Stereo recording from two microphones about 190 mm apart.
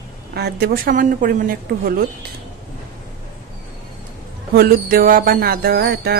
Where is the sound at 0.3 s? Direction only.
55° right (ahead or behind).